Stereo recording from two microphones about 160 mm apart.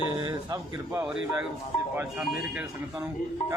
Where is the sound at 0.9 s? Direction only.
5° right (ahead or behind).